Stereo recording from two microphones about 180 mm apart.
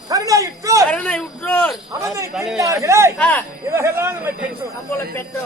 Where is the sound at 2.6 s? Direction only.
15° right (ahead or behind).